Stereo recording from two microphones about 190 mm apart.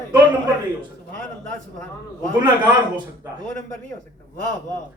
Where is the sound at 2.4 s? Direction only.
25° right (ahead or behind).